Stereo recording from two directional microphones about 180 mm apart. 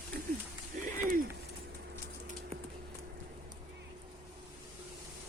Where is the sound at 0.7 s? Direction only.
45° right (ahead or behind).